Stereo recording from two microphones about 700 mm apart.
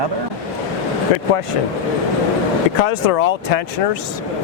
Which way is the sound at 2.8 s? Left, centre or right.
Left.